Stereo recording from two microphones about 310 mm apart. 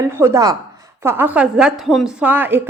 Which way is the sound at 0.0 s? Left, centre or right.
Centre.